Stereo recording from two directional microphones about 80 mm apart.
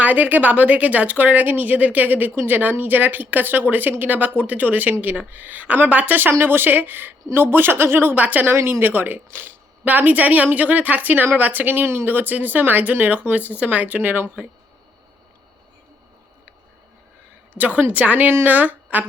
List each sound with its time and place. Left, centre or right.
0.0 s speech: right
8.5 s speech: right
17.5 s a woman's voice: right